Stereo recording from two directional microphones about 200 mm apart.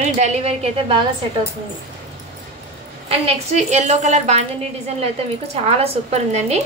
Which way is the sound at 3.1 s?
30° right (ahead or behind).